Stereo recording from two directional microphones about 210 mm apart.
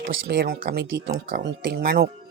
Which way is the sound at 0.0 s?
45° right (ahead or behind).